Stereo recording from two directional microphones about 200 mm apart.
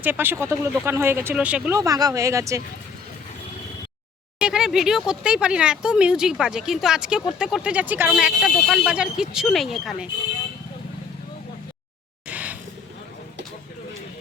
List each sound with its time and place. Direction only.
0.0 s speech: 10° right (ahead or behind)
1.8 s speech: 15° right (ahead or behind)
4.4 s speech: 5° right (ahead or behind)
12.3 s a sound: 5° right (ahead or behind)